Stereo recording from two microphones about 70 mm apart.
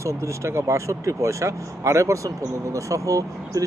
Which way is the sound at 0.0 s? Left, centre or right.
Right.